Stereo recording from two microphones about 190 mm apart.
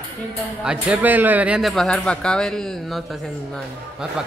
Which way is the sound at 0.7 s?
5° right (ahead or behind).